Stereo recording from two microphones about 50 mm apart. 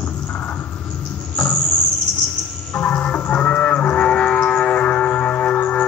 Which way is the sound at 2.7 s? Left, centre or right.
Left.